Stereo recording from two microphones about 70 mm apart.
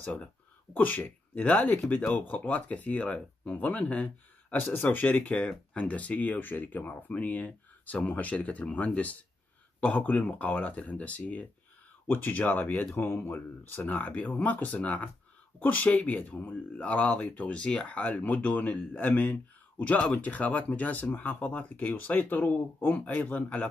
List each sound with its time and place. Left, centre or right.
0.7 s speech: left
17.6 s speech: centre